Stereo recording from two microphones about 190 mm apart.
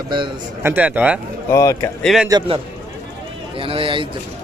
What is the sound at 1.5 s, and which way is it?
Speech, 15° left (ahead or behind).